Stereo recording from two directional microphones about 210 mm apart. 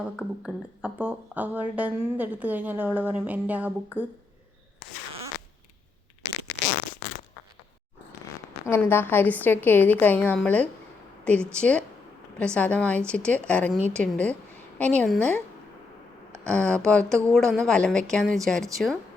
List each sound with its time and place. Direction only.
0.0 s speech: 5° right (ahead or behind)
8.6 s a woman's voice: 10° left (ahead or behind)
16.4 s speech: 5° left (ahead or behind)